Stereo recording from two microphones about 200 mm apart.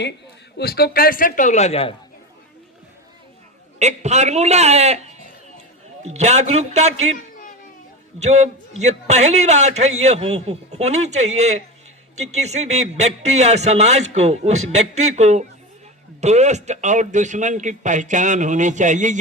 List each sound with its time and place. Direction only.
0.5 s a man's voice: 50° left (ahead or behind); by 2.0 s 30° left (ahead or behind)
3.8 s speech: 35° right (ahead or behind)
7.2 s a sound: 40° left (ahead or behind)
8.2 s speech: 35° right (ahead or behind)